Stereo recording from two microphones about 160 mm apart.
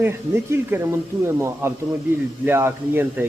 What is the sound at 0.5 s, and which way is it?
Speech, 15° right (ahead or behind).